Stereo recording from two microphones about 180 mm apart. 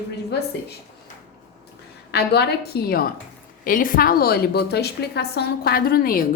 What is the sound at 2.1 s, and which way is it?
A woman's voice, 65° left (ahead or behind).